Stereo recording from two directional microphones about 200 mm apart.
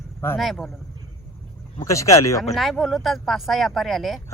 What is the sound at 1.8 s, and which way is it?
Speech, 15° left (ahead or behind).